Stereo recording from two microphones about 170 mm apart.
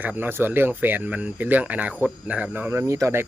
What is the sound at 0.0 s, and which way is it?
Speech, 10° right (ahead or behind).